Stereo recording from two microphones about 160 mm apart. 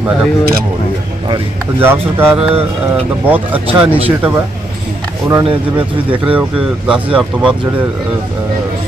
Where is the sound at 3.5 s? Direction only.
35° right (ahead or behind).